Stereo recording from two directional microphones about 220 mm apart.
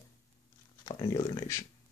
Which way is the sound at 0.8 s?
20° left (ahead or behind).